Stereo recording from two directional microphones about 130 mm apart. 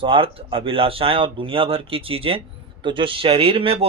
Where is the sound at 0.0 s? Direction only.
45° right (ahead or behind).